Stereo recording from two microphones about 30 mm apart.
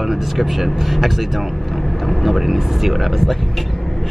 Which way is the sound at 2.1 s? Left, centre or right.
Centre.